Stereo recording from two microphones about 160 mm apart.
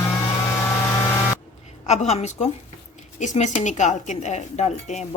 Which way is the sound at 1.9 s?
45° left (ahead or behind).